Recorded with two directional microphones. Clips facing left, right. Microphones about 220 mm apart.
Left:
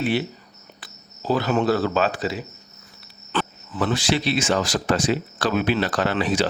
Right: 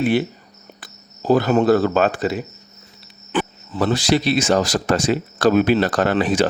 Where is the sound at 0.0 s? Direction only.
45° right (ahead or behind).